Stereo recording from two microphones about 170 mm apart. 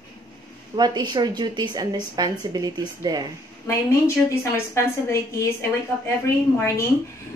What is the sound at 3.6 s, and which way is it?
Speech, 15° left (ahead or behind).